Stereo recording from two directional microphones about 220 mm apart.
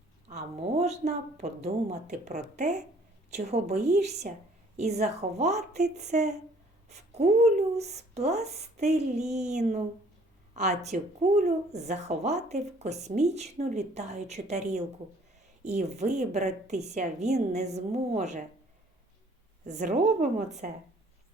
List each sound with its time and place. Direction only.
0.3 s speech: 30° right (ahead or behind)
19.6 s speech: 35° right (ahead or behind)